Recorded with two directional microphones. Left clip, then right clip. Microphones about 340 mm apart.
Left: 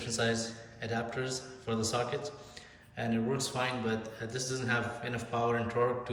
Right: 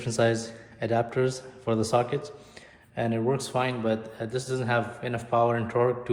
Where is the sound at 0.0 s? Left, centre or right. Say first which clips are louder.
Right 7 dB; centre.